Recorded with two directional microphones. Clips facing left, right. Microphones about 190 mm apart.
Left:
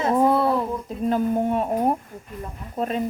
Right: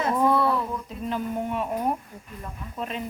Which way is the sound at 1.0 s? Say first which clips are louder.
Left 8 dB; 45° left (ahead or behind).